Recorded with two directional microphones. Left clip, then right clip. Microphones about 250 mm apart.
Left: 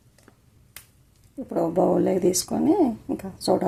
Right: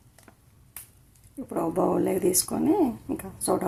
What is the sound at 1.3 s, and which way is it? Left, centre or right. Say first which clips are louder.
Speech: left 4 dB; centre.